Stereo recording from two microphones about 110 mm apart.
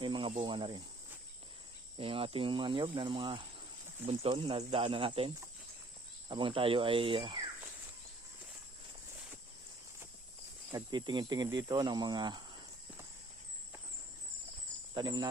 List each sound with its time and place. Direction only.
0.0 s speech: 50° right (ahead or behind)
2.0 s speech: 55° right (ahead or behind)
4.0 s speech: 65° right (ahead or behind); by 7.5 s 45° right (ahead or behind)
10.7 s speech: 40° right (ahead or behind)
14.9 s speech: 40° right (ahead or behind)